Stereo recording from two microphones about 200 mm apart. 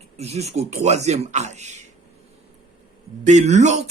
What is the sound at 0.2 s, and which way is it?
Speech, 30° right (ahead or behind).